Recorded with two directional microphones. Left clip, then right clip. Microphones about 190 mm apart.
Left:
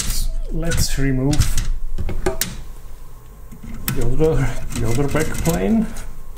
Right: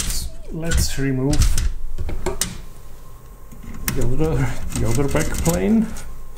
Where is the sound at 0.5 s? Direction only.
5° left (ahead or behind).